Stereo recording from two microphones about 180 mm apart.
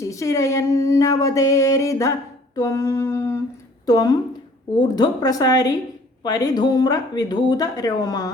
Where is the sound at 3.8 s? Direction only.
20° left (ahead or behind).